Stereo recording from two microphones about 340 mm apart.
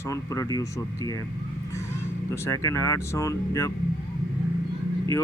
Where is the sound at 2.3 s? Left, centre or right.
Centre.